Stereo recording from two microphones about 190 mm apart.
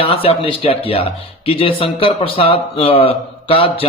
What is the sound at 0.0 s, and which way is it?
Speech, 30° left (ahead or behind).